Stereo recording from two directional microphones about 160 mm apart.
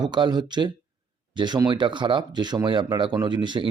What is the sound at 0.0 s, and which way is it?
A man's voice, 25° right (ahead or behind).